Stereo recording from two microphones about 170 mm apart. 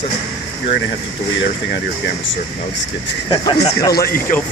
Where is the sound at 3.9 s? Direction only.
65° left (ahead or behind).